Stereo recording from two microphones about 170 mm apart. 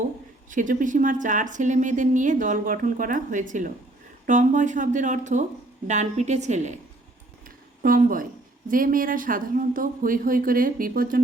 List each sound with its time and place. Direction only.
0.5 s a woman's voice: 50° right (ahead or behind)
7.4 s a sound: 55° right (ahead or behind)
8.7 s speech: 55° right (ahead or behind)